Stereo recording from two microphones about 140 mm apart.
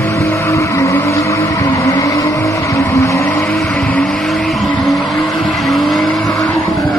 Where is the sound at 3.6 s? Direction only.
5° left (ahead or behind).